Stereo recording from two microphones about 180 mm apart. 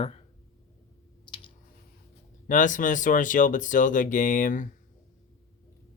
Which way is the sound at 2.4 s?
45° left (ahead or behind).